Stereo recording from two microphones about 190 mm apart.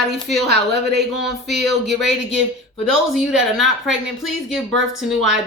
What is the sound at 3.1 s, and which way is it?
Speech, centre (ahead or behind).